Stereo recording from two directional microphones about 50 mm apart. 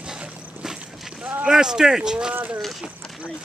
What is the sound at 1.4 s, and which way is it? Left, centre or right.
Speech, centre.